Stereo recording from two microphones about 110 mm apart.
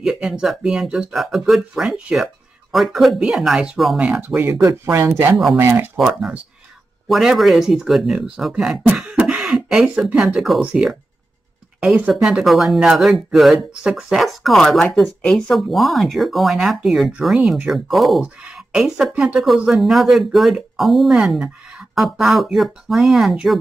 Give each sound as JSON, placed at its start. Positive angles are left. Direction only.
{"t": 0.0, "sound": "speech", "side_deg": -5}
{"t": 4.3, "sound": "speech", "side_deg": -15}
{"t": 5.9, "sound": "speech", "side_deg": -5}
{"t": 8.9, "sound": "cough", "side_deg": -10}
{"t": 10.6, "sound": "speech", "side_deg": -10}